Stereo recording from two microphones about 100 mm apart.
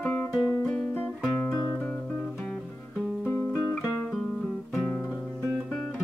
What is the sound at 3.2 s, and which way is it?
Guitar, 25° left (ahead or behind).